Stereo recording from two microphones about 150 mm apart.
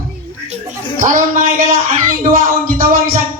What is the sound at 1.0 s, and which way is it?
Speech, 60° right (ahead or behind).